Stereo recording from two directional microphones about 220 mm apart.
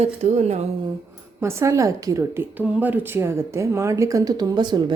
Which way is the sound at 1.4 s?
10° right (ahead or behind).